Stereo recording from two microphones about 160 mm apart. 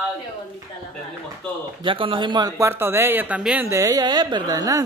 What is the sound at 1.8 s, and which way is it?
Speech, 30° right (ahead or behind).